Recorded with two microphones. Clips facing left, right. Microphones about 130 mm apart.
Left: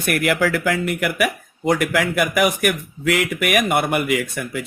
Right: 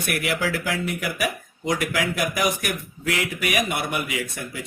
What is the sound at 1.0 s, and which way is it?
Speech, 65° left (ahead or behind).